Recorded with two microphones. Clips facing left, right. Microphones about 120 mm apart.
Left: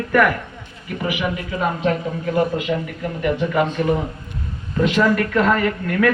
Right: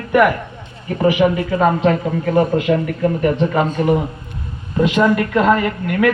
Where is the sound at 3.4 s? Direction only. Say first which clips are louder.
Right 2 dB; 35° right (ahead or behind).